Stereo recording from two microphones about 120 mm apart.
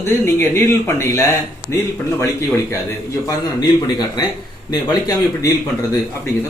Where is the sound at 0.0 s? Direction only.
20° left (ahead or behind).